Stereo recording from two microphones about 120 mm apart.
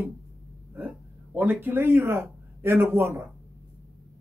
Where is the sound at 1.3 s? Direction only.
15° right (ahead or behind).